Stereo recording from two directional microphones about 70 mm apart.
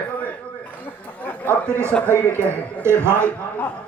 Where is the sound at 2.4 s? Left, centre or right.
Right.